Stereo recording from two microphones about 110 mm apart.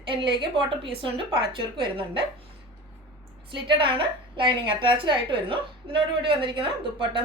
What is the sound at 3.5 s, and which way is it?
A woman's voice, 50° right (ahead or behind).